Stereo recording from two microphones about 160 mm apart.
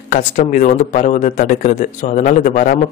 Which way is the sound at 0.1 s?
55° left (ahead or behind).